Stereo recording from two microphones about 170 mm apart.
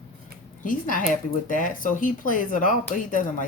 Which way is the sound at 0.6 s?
50° left (ahead or behind).